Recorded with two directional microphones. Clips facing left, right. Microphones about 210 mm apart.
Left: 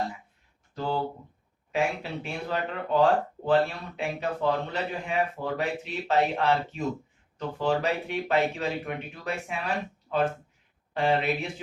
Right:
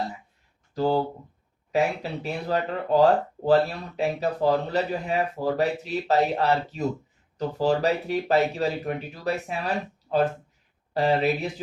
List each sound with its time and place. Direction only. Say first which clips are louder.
0.7 s speech: right 6 dB; 40° right (ahead or behind)